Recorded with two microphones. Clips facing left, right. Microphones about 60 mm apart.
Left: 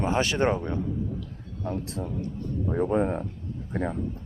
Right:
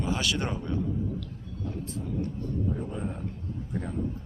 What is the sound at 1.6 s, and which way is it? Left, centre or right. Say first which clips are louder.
A man's voice: left 4 dB; left.